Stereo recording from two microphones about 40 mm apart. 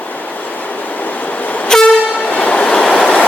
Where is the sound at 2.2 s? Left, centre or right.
Left.